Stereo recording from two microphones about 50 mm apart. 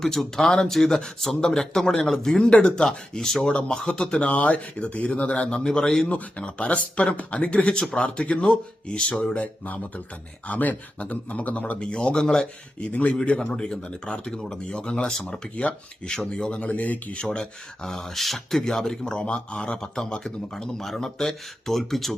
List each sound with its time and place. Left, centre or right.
0.0 s speech: centre
2.5 s speech: left
2.7 s speech: centre
6.1 s speech: left
9.3 s speech: left; by 12.9 s centre
12.9 s speech: left
17.2 s speech: centre